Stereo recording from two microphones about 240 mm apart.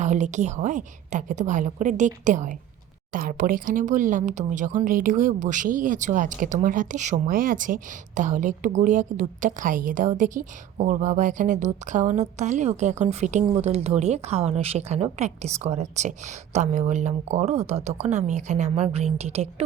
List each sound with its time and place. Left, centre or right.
0.0 s speech: right